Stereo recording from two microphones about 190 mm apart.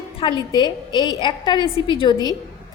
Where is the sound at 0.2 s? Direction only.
25° left (ahead or behind).